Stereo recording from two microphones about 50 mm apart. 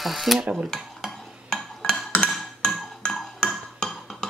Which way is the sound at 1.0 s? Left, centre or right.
Centre.